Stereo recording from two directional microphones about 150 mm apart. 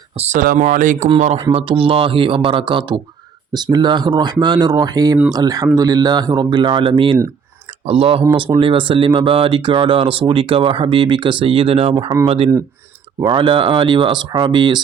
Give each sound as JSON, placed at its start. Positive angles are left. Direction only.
{"t": 0.2, "sound": "speech", "side_deg": -50}
{"t": 1.5, "sound": "speech", "side_deg": -35}